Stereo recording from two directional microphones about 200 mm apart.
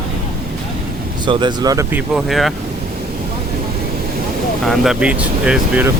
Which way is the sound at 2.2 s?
Centre (ahead or behind).